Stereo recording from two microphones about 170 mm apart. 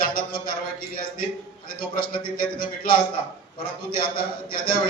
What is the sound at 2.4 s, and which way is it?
Speech, 60° left (ahead or behind).